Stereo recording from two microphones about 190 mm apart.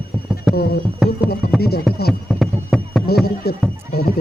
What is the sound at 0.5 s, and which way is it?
Speech, 55° left (ahead or behind).